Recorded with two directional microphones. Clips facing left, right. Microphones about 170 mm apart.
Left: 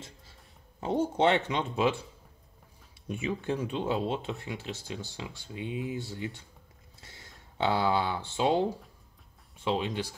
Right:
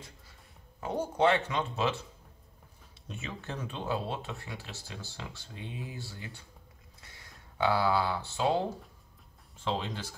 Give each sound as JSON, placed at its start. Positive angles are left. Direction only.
{"t": 0.7, "sound": "speech", "side_deg": 25}
{"t": 3.1, "sound": "speech", "side_deg": 15}
{"t": 7.0, "sound": "a sound", "side_deg": 25}
{"t": 9.8, "sound": "speech", "side_deg": 15}